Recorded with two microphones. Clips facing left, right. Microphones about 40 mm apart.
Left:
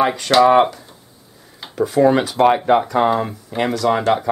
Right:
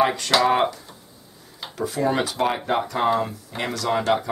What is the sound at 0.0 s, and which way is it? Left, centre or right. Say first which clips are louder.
Speech: left 6 dB; centre.